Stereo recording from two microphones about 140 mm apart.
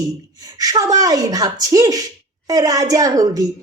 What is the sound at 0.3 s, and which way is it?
Speech, 25° right (ahead or behind).